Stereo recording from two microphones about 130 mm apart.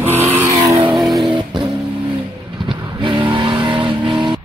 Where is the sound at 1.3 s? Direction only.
40° right (ahead or behind).